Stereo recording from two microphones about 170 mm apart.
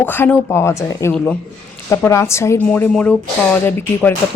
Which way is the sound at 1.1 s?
5° left (ahead or behind).